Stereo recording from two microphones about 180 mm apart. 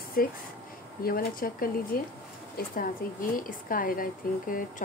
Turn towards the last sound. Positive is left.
turn(degrees=50)  # may be behind; listen again after turning